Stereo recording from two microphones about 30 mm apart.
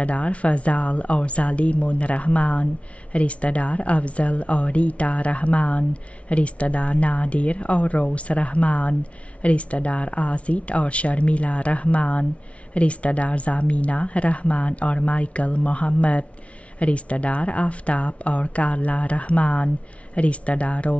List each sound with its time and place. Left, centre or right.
0.0 s speech: left